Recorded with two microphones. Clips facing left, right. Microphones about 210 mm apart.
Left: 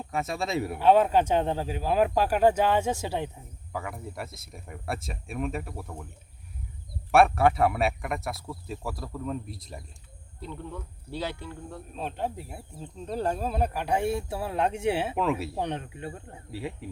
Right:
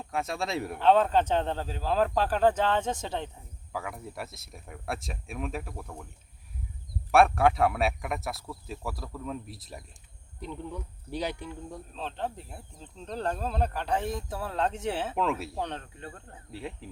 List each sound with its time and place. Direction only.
0.0 s speech: centre (ahead or behind)
7.1 s speech: centre (ahead or behind)
10.4 s speech: 15° right (ahead or behind)
11.9 s speech: 10° left (ahead or behind)
15.6 s speech: 15° left (ahead or behind)
16.5 s speech: 5° left (ahead or behind)